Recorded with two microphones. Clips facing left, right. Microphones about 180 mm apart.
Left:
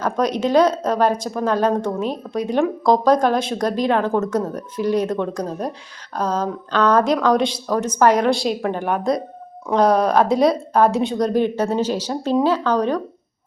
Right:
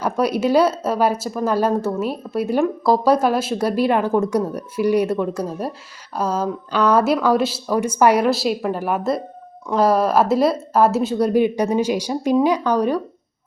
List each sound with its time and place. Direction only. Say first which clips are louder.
0.0 s speech: right 1 dB; 10° right (ahead or behind)